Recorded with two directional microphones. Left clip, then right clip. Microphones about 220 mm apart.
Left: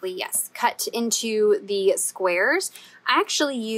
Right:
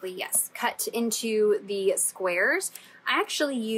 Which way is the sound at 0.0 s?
15° left (ahead or behind).